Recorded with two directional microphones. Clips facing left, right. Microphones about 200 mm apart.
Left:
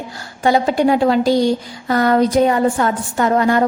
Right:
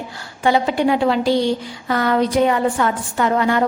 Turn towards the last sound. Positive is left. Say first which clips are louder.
# left 3 dB
turn(degrees=40)  # may be behind; listen again after turning